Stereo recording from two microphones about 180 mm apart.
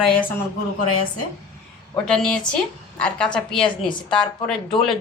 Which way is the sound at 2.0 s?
5° left (ahead or behind).